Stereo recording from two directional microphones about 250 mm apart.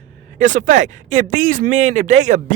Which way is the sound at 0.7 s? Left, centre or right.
Right.